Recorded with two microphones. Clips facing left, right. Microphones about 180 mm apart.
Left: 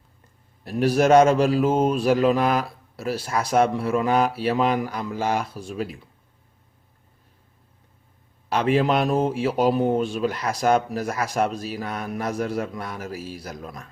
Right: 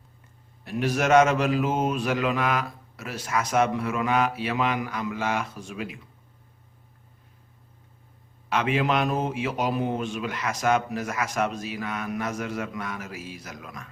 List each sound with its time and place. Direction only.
0.6 s a man's voice: 35° left (ahead or behind)
8.4 s a man's voice: 35° left (ahead or behind)